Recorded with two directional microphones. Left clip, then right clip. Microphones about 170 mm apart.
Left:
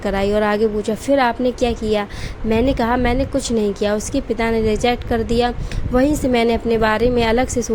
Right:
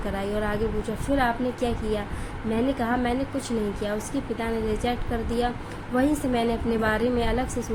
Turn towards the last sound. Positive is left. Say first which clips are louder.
# left 10 dB
turn(degrees=50)  # may be behind; listen again after turning